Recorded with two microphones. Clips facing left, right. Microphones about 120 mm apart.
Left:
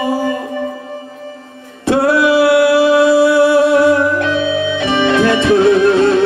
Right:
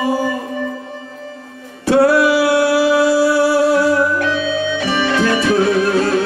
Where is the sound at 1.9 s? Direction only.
25° left (ahead or behind).